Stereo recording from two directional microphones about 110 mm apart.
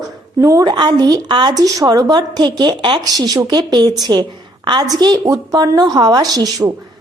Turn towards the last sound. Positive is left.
turn(degrees=-35)  # may be behind; listen again after turning